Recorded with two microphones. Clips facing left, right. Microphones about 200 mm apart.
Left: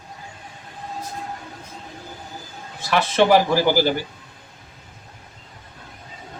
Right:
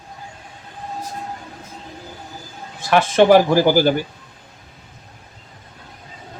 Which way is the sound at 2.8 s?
50° right (ahead or behind).